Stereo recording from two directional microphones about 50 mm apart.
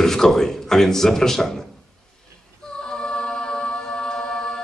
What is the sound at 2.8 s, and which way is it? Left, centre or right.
A capella, centre.